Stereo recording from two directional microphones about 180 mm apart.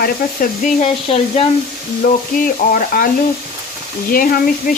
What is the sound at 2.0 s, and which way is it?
Speech, 50° left (ahead or behind).